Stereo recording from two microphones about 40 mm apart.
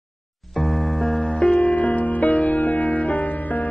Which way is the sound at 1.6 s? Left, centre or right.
Left.